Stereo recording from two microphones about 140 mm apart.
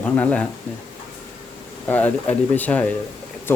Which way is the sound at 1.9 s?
10° left (ahead or behind).